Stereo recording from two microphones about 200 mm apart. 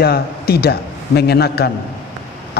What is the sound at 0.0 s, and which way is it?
A man's voice, 50° left (ahead or behind).